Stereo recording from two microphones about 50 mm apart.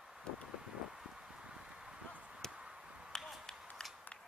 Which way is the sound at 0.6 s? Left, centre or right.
Centre.